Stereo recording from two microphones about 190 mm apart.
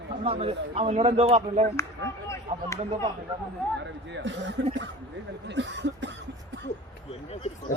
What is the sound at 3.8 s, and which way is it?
Speech, 70° right (ahead or behind).